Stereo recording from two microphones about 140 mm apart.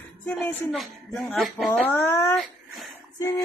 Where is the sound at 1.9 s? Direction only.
20° left (ahead or behind).